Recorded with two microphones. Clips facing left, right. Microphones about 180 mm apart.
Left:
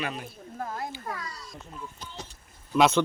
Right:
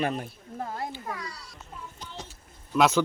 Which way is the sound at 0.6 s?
25° right (ahead or behind).